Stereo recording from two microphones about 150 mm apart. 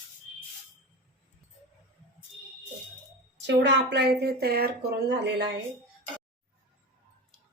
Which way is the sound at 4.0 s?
90° right.